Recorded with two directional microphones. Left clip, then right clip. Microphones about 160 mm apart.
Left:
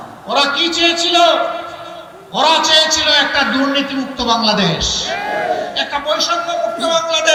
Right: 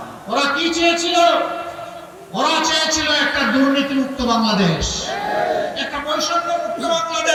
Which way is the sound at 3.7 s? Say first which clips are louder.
Left 1 dB; 30° left (ahead or behind).